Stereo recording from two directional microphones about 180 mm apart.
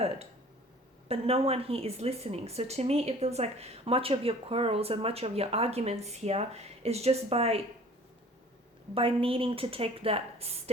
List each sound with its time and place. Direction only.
1.0 s speech: 35° right (ahead or behind)
9.0 s speech: 30° right (ahead or behind)